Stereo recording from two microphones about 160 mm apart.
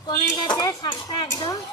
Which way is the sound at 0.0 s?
30° left (ahead or behind).